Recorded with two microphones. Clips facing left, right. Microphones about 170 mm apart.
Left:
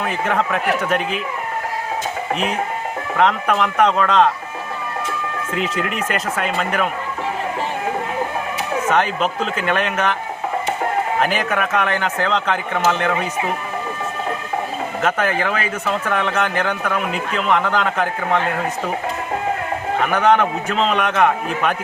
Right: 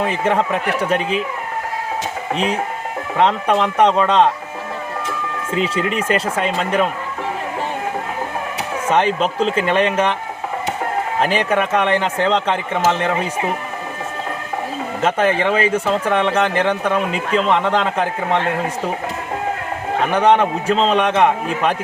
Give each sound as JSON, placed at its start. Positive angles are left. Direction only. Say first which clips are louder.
{"t": 0.0, "sound": "speech", "louder": "right 3 dB", "side_deg": -30}
{"t": 3.2, "sound": "speech", "louder": "right 2 dB", "side_deg": -30}
{"t": 5.5, "sound": "speech", "louder": "right 4 dB", "side_deg": -30}
{"t": 8.9, "sound": "speech", "louder": "right 3 dB", "side_deg": -30}
{"t": 11.2, "sound": "speech", "louder": "right 2 dB", "side_deg": -35}
{"t": 15.4, "sound": "speech", "louder": "right 5 dB", "side_deg": -30}
{"t": 20.1, "sound": "speech", "louder": "right 2 dB", "side_deg": -30}